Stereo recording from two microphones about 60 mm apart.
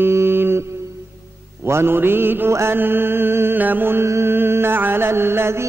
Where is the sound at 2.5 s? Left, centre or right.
Right.